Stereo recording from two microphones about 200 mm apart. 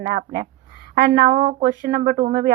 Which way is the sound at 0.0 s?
45° right (ahead or behind).